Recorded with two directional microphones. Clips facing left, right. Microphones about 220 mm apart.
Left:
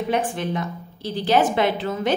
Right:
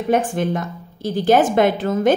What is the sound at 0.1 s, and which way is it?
A woman's voice, 45° right (ahead or behind).